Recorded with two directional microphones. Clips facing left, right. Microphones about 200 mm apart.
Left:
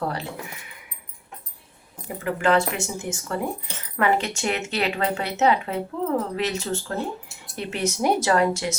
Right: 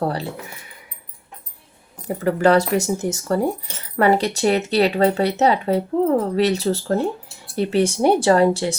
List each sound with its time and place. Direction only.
0.0 s speech: 30° right (ahead or behind)
2.0 s speech: 40° right (ahead or behind)